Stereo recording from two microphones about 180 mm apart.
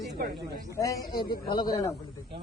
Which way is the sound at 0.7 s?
20° left (ahead or behind).